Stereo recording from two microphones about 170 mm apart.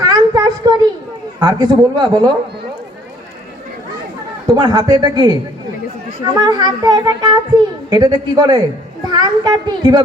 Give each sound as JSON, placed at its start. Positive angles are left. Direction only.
{"t": 0.0, "sound": "a sound", "side_deg": -25}
{"t": 1.4, "sound": "speech", "side_deg": -25}
{"t": 4.4, "sound": "speech", "side_deg": -25}
{"t": 6.4, "sound": "speech", "side_deg": -25}